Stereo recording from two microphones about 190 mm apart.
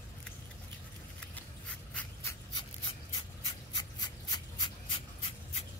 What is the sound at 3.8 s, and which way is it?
Rub, 20° left (ahead or behind).